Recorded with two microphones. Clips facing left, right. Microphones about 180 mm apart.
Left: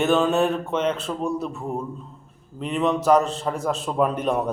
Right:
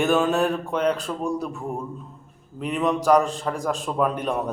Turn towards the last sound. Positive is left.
turn(degrees=0)  # may be behind; listen again after turning